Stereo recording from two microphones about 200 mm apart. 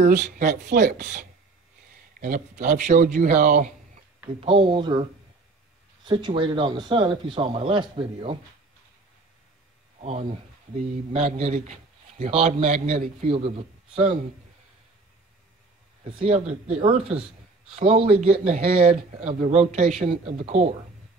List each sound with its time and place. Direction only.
0.0 s a man's voice: 40° right (ahead or behind)
4.4 s a man's voice: 25° right (ahead or behind)
6.0 s a man's voice: 25° right (ahead or behind)
11.1 s a man's voice: 30° right (ahead or behind)
16.0 s a man's voice: 30° right (ahead or behind)